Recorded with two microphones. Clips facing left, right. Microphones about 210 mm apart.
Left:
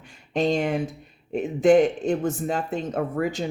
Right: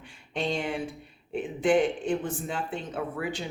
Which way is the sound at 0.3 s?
40° left (ahead or behind).